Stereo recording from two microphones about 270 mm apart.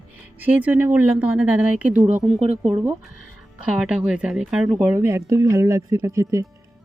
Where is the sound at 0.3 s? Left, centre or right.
Centre.